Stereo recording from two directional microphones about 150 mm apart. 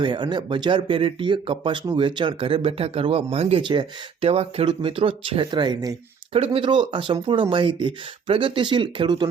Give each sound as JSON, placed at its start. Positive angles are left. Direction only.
{"t": 0.0, "sound": "speech", "side_deg": -30}
{"t": 6.3, "sound": "speech", "side_deg": -40}